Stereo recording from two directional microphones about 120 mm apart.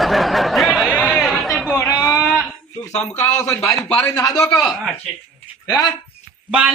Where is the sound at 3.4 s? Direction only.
25° left (ahead or behind).